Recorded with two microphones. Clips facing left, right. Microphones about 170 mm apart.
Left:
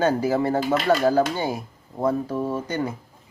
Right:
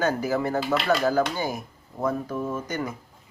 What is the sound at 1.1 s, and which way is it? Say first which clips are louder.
Speech: left 3 dB; 30° left (ahead or behind).